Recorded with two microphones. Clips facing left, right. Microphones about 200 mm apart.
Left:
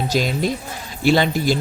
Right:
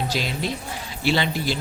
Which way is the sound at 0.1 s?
45° left (ahead or behind).